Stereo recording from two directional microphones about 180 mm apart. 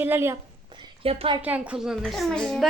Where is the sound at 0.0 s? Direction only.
15° right (ahead or behind).